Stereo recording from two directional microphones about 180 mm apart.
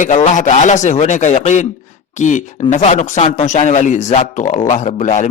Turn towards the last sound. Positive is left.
turn(degrees=45)  # may be behind; listen again after turning